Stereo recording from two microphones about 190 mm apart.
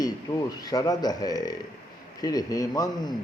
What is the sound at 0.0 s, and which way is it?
A man's voice, 20° left (ahead or behind).